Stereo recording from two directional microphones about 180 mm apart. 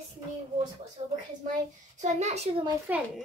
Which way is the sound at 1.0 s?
35° right (ahead or behind).